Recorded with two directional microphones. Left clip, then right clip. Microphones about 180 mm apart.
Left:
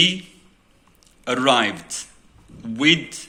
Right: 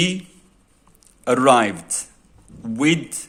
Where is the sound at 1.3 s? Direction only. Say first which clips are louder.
Right 3 dB; 55° right (ahead or behind).